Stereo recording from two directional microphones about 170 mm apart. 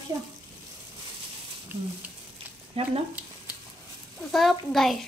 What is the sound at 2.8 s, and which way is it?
Speech, 35° right (ahead or behind).